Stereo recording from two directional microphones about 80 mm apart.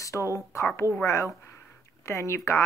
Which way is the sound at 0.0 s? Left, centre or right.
Left.